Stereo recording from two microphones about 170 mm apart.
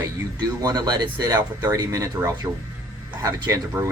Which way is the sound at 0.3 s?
25° right (ahead or behind).